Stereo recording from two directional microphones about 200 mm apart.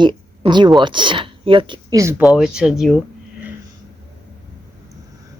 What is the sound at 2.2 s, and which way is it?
Speech, 5° right (ahead or behind).